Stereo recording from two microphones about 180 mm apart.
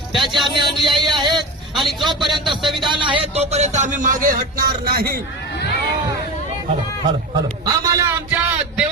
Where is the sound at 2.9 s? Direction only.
25° right (ahead or behind); by 5.2 s 60° right (ahead or behind).